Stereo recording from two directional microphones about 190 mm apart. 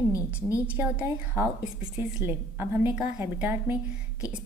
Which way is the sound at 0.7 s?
10° right (ahead or behind).